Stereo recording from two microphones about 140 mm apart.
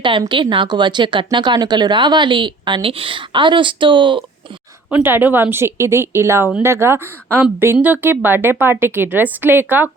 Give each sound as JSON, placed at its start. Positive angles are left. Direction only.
{"t": 0.0, "sound": "speech", "side_deg": -35}
{"t": 4.9, "sound": "speech", "side_deg": -15}